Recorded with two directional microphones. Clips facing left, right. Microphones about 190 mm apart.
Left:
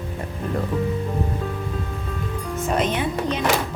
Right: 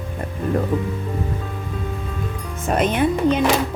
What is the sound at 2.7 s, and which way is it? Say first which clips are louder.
Speech: right 5 dB; 55° right (ahead or behind).